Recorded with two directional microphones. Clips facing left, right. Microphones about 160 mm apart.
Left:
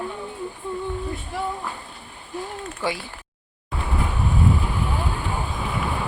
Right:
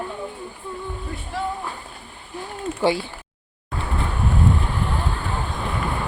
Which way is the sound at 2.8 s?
30° right (ahead or behind).